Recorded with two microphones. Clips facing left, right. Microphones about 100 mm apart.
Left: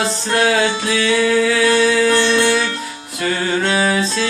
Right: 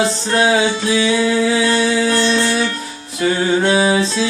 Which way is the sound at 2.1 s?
20° left (ahead or behind).